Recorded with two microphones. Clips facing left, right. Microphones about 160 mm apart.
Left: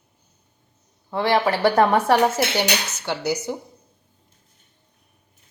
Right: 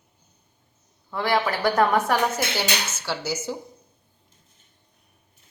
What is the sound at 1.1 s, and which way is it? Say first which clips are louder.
Speech: left 4 dB; 25° left (ahead or behind).